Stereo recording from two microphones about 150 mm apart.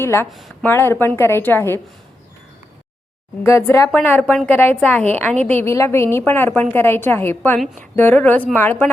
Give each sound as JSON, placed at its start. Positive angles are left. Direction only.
{"t": 0.0, "sound": "a woman's voice", "side_deg": 15}
{"t": 0.3, "sound": "a woman's voice", "side_deg": 0}
{"t": 0.6, "sound": "a woman's voice", "side_deg": 15}
{"t": 3.4, "sound": "a woman's voice", "side_deg": 20}